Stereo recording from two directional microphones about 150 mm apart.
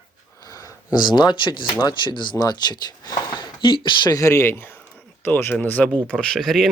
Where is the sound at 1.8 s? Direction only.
30° left (ahead or behind).